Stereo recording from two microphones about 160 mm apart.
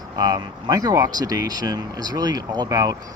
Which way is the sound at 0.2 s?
25° right (ahead or behind).